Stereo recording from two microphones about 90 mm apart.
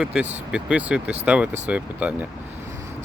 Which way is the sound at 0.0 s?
10° right (ahead or behind).